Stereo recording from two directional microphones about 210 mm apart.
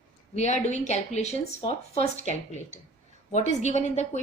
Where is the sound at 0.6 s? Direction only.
35° left (ahead or behind).